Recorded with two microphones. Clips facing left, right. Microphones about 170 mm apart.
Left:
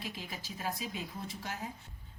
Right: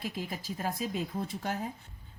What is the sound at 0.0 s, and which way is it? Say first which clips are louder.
Speech: right 6 dB; 50° right (ahead or behind).